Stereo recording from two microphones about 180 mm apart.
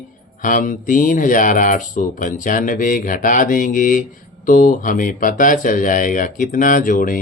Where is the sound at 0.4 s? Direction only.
50° left (ahead or behind).